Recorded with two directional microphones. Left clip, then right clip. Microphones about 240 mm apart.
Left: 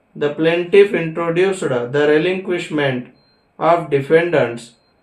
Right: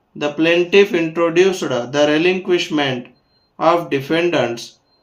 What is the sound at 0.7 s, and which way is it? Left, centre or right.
Speech, right.